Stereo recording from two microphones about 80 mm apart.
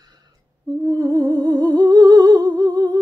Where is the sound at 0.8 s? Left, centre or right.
Right.